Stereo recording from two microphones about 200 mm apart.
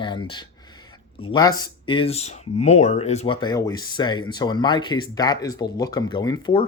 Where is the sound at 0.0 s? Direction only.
25° left (ahead or behind).